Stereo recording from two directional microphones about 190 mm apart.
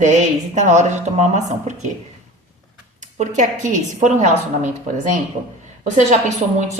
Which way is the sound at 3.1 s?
40° right (ahead or behind).